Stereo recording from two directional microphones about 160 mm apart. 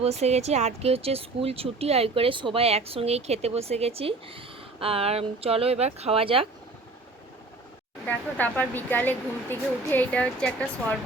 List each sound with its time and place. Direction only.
0.0 s speech: 40° right (ahead or behind)
8.0 s speech: 10° left (ahead or behind)